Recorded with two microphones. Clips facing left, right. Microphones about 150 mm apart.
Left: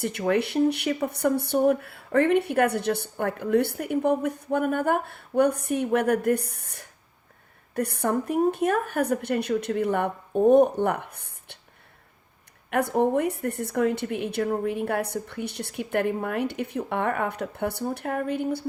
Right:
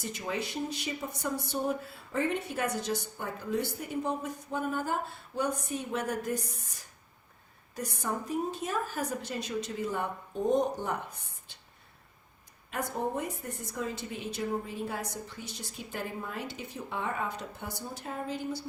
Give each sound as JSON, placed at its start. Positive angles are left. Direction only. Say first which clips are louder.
{"t": 0.0, "sound": "speech", "louder": "left 11 dB", "side_deg": 65}
{"t": 12.7, "sound": "speech", "louder": "left 10 dB", "side_deg": 65}